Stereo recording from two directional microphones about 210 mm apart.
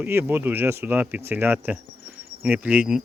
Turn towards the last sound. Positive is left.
turn(degrees=-5)  # may be behind; listen again after turning